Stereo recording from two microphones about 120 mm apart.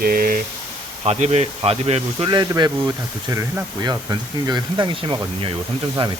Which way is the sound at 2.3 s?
35° right (ahead or behind).